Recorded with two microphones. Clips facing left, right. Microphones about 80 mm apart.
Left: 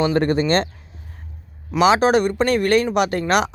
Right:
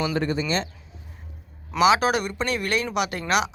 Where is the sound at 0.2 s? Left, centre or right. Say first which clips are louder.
Left 7 dB; left.